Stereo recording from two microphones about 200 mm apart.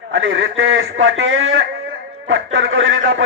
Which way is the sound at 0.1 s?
70° right (ahead or behind).